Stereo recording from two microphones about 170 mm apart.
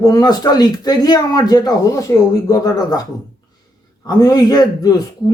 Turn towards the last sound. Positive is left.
turn(degrees=20)  # may be behind; listen again after turning